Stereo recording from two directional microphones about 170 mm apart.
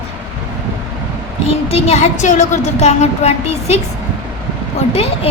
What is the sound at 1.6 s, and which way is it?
A woman's voice, 35° left (ahead or behind).